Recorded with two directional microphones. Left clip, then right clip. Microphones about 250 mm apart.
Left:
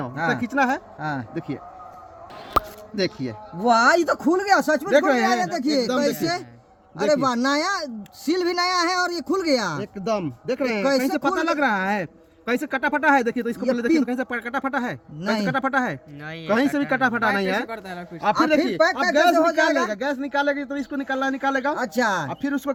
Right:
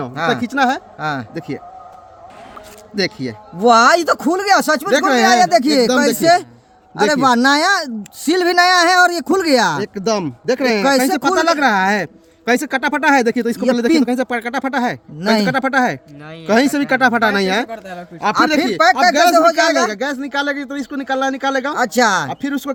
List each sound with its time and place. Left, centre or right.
0.0 s speech: right
2.9 s speech: right